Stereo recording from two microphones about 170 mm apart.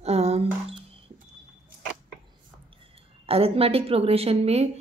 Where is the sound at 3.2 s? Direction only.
35° right (ahead or behind).